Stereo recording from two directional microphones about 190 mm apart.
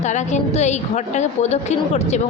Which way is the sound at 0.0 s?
40° left (ahead or behind).